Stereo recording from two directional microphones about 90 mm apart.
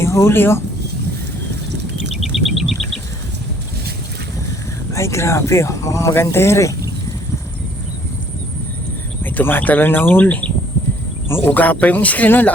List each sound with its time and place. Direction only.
0.0 s speech: 30° left (ahead or behind)
2.1 s insect: centre (ahead or behind)
4.9 s speech: 35° left (ahead or behind)
9.2 s speech: 20° left (ahead or behind)